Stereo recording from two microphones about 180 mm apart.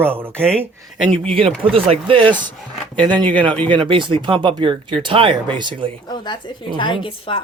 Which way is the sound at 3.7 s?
25° right (ahead or behind).